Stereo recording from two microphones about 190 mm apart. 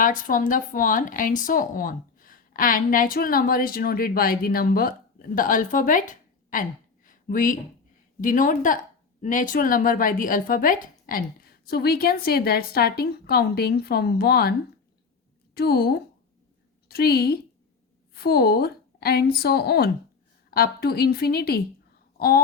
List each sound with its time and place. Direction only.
0.0 s speech: 45° left (ahead or behind)
15.5 s a woman's voice: 55° left (ahead or behind)